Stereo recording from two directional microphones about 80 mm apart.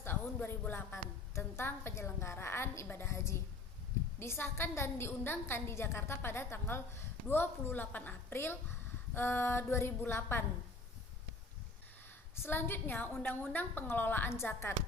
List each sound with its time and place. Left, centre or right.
0.0 s a woman's voice: left
12.4 s a woman's voice: left